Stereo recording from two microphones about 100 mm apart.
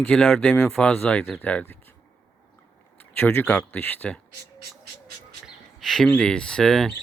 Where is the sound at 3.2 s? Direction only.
20° left (ahead or behind).